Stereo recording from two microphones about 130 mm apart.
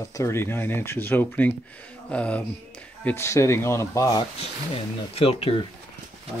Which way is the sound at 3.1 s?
20° left (ahead or behind).